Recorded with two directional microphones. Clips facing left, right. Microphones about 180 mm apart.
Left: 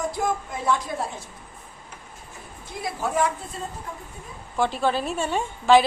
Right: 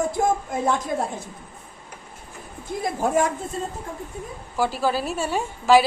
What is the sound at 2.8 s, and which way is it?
Speech, 50° right (ahead or behind).